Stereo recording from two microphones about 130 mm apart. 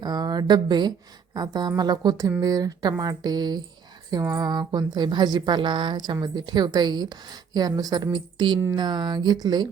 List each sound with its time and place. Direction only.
0.0 s speech: 30° right (ahead or behind)